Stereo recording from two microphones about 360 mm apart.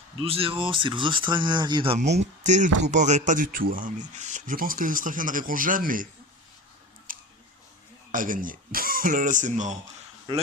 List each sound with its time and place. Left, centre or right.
0.2 s speech: centre
7.1 s a sound: right
8.1 s speech: right